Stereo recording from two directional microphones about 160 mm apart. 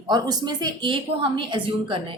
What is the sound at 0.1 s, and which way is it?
A woman's voice, 25° right (ahead or behind).